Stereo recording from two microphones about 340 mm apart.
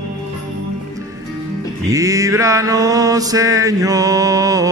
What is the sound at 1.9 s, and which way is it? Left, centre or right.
Mantra, centre.